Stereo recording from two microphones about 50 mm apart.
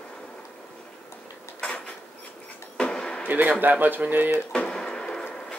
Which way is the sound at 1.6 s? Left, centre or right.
Left.